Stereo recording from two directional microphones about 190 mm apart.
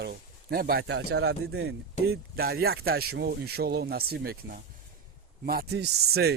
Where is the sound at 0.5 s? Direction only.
50° right (ahead or behind).